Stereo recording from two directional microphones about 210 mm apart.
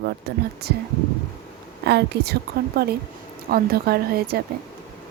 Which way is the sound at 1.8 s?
50° right (ahead or behind).